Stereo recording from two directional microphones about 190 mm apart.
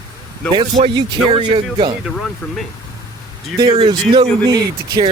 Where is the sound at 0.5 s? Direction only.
25° right (ahead or behind).